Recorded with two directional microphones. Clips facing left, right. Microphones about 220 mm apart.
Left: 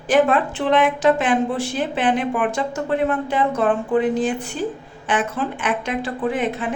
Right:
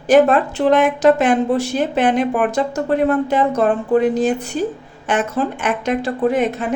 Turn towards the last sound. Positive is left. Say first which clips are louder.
# right 5 dB
turn(degrees=-40)  # may be behind; listen again after turning